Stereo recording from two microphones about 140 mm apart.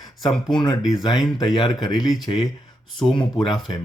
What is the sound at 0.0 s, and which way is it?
Speech, 30° left (ahead or behind).